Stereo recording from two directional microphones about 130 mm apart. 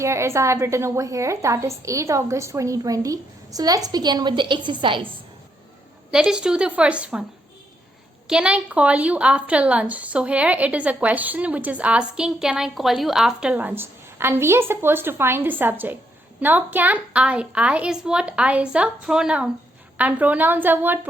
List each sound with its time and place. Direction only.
0.0 s a woman's voice: 20° right (ahead or behind); by 5.0 s 40° right (ahead or behind)
6.1 s a woman's voice: 5° right (ahead or behind)
8.3 s a woman's voice: 10° right (ahead or behind)